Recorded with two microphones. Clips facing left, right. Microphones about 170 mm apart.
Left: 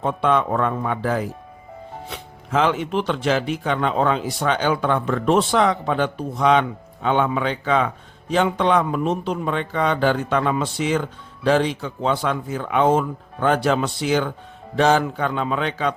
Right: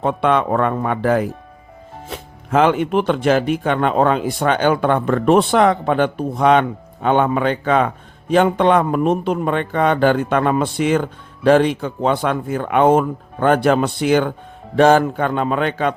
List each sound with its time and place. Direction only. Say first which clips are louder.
0.0 s speech: right 3 dB; 65° right (ahead or behind)
2.0 s a man's voice: right 4 dB; 50° right (ahead or behind)